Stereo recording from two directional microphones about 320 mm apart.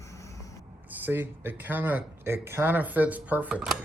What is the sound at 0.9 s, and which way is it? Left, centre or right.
Speech, centre.